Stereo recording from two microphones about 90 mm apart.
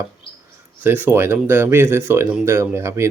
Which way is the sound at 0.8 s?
20° right (ahead or behind).